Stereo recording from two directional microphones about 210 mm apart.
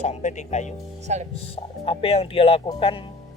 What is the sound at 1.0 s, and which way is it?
Speech, 35° right (ahead or behind).